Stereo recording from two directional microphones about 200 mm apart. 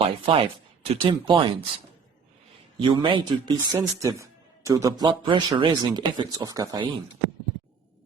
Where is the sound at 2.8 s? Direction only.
25° right (ahead or behind).